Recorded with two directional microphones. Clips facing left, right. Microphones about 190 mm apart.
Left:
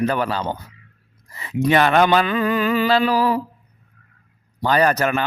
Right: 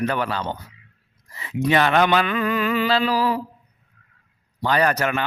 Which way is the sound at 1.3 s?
45° left (ahead or behind).